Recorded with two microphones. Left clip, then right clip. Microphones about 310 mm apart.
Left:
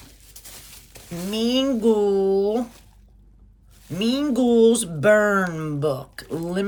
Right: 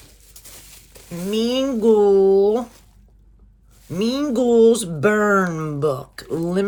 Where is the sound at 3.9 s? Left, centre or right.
Centre.